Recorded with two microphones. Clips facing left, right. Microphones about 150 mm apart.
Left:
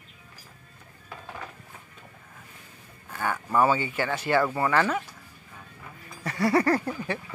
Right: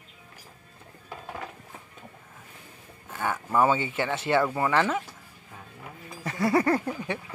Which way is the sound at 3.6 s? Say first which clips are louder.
Even; 20° right (ahead or behind).